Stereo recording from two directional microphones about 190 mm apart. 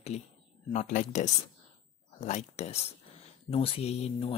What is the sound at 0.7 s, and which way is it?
Speech, 40° left (ahead or behind).